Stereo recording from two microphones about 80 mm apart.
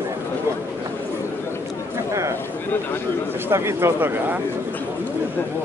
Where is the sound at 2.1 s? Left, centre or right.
Right.